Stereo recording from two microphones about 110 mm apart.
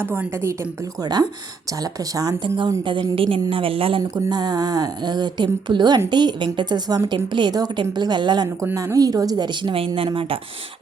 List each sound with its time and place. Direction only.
0.0 s a woman's voice: 20° right (ahead or behind)
1.0 s speech: 40° right (ahead or behind)
2.8 s a woman's voice: 50° right (ahead or behind)
4.1 s speech: 40° right (ahead or behind)
8.7 s speech: 30° right (ahead or behind); by 10.3 s 55° right (ahead or behind)